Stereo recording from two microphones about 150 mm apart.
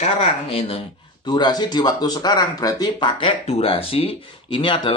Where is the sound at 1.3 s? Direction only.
30° left (ahead or behind).